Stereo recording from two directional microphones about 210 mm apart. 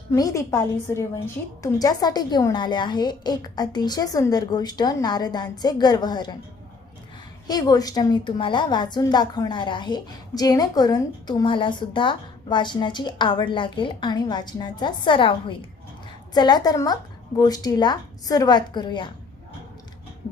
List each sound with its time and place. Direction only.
0.1 s a woman's voice: 15° left (ahead or behind)
7.4 s a woman's voice: 20° left (ahead or behind)